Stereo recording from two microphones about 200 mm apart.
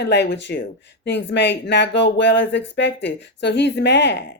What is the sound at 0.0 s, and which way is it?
A woman's voice, 60° left (ahead or behind).